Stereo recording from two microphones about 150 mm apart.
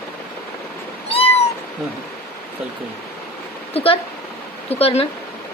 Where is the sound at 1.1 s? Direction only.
40° left (ahead or behind).